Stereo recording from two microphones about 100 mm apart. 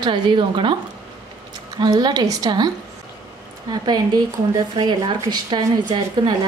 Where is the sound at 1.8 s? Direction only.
40° right (ahead or behind).